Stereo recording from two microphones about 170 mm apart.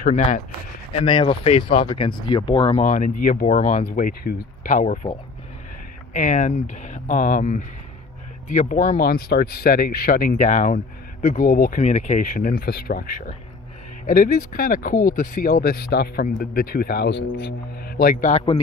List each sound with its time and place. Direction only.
0.0 s speech: 45° left (ahead or behind)
0.9 s speech: 30° left (ahead or behind)
2.8 s speech: 50° left (ahead or behind)
3.9 s speech: 60° left (ahead or behind)
6.1 s speech: 45° left (ahead or behind)
18.3 s speech: 40° left (ahead or behind)